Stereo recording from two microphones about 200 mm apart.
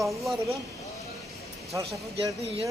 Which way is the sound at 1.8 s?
30° right (ahead or behind).